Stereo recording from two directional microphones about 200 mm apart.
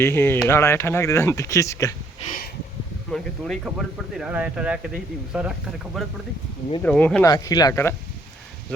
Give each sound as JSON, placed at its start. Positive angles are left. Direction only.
{"t": 0.0, "sound": "speech", "side_deg": 10}
{"t": 2.2, "sound": "a sound", "side_deg": 45}
{"t": 3.1, "sound": "speech", "side_deg": 0}
{"t": 7.3, "sound": "speech", "side_deg": 20}